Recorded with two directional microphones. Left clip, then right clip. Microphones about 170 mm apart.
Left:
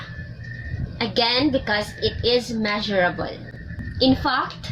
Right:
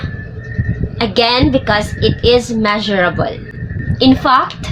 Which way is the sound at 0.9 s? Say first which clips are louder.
Right 8 dB; 35° right (ahead or behind).